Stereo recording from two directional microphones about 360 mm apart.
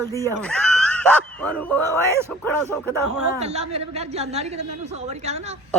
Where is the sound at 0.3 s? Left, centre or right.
Centre.